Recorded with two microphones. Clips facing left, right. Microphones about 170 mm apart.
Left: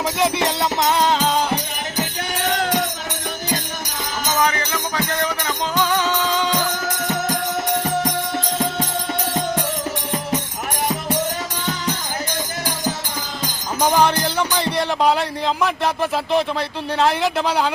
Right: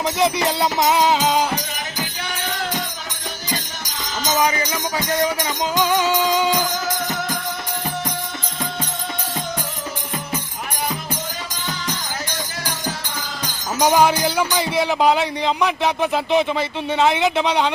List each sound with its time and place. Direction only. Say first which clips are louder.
0.0 s speech: right 1 dB; 5° left (ahead or behind)
2.4 s music: left 6 dB; 70° left (ahead or behind)
4.3 s music: right 1 dB; 15° right (ahead or behind)
6.8 s music: left 2 dB; 70° left (ahead or behind)
13.7 s speech: right 1 dB; 10° right (ahead or behind)